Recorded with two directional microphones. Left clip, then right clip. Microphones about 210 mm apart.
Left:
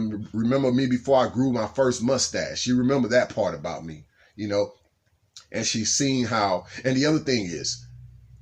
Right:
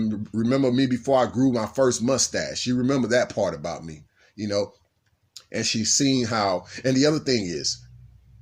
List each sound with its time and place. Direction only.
0.3 s speech: 40° right (ahead or behind)